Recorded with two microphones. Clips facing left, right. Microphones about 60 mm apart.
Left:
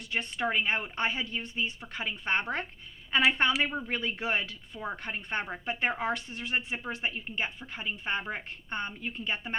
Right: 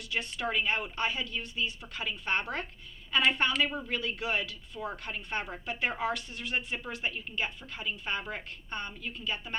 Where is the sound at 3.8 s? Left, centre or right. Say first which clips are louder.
Left 1 dB; left.